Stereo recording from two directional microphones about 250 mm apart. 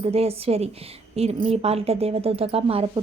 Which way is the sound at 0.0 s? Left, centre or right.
Right.